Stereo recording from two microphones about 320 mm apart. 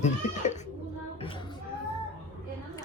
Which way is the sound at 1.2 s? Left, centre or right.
Centre.